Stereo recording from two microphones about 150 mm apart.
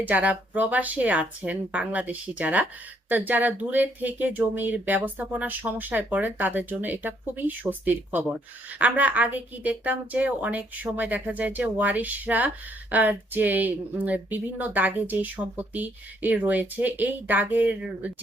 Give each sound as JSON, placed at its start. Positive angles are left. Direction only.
{"t": 0.0, "sound": "speech", "side_deg": -10}